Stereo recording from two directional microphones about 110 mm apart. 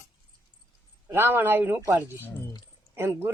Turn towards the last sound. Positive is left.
turn(degrees=-20)  # may be behind; listen again after turning